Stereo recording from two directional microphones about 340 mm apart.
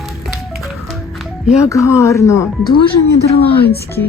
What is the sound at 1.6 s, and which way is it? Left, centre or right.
Speech, centre.